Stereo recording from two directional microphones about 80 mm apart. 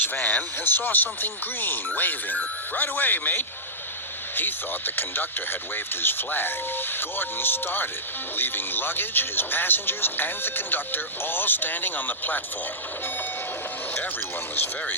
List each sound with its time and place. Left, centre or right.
0.0 s speech: left
4.9 s speech: left
14.5 s speech: left